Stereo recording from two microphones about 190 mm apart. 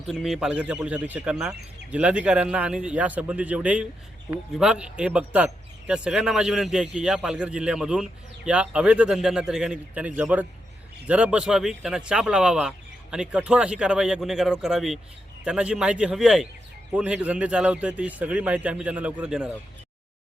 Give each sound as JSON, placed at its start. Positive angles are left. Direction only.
{"t": 0.1, "sound": "a man's voice", "side_deg": 0}